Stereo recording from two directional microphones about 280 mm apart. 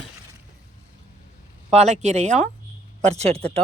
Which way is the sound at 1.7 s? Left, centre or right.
Right.